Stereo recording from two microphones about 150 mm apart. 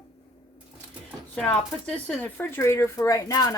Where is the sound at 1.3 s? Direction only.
10° left (ahead or behind).